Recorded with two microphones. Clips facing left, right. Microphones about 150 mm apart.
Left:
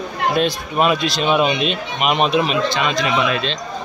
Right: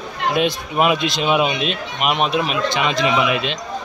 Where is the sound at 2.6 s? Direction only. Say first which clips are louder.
Right 1 dB; 20° right (ahead or behind).